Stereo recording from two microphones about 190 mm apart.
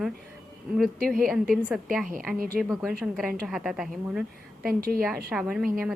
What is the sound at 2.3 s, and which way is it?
Speech, 5° right (ahead or behind).